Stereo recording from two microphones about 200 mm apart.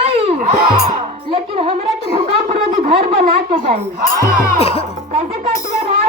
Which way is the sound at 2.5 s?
30° right (ahead or behind).